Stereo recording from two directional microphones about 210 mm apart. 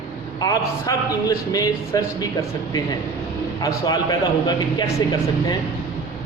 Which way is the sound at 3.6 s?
20° left (ahead or behind).